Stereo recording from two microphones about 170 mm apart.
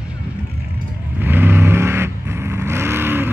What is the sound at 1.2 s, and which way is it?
Vehicle, 10° right (ahead or behind).